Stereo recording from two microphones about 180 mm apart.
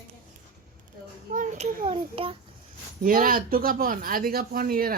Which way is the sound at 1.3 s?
45° right (ahead or behind).